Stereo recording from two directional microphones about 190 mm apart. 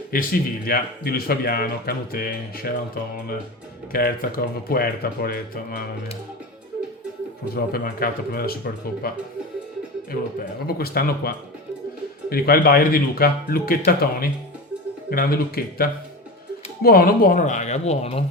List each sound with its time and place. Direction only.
0.1 s speech: 50° left (ahead or behind)
3.9 s speech: 50° left (ahead or behind)
7.5 s speech: 50° left (ahead or behind)
10.7 s speech: 55° left (ahead or behind); by 18.3 s 30° left (ahead or behind)